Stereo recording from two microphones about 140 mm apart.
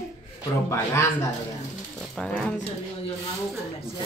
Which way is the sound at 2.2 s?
5° left (ahead or behind).